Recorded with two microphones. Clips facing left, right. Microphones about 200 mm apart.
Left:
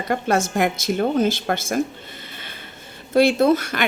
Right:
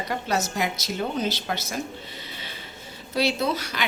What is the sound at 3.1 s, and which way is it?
Speech, 50° left (ahead or behind).